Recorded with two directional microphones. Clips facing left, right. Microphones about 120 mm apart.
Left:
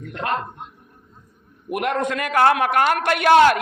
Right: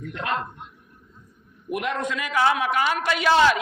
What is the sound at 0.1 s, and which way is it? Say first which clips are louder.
Speech: left 4 dB; 45° left (ahead or behind).